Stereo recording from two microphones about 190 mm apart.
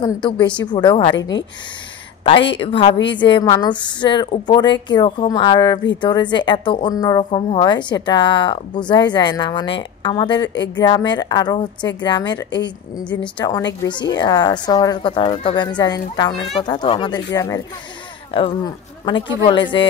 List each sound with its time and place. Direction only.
0.0 s a woman's voice: 25° left (ahead or behind)
2.6 s a woman's voice: 30° left (ahead or behind)
19.4 s a woman's voice: 25° left (ahead or behind)